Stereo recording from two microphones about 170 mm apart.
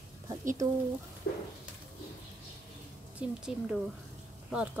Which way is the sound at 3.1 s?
5° right (ahead or behind).